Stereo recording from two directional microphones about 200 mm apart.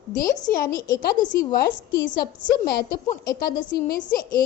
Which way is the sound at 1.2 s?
20° left (ahead or behind).